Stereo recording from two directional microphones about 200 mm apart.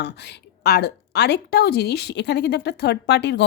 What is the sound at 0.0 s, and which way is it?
A woman's voice, 55° left (ahead or behind).